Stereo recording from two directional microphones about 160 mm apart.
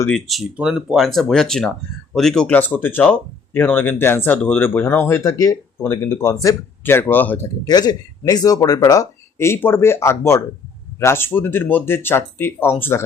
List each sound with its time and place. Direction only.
0.1 s speech: centre (ahead or behind)
7.7 s speech: 25° left (ahead or behind)